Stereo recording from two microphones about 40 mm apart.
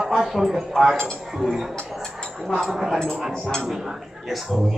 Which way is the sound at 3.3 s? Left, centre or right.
Centre.